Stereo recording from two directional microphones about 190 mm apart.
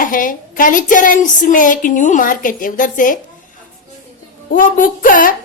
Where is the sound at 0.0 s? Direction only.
45° left (ahead or behind).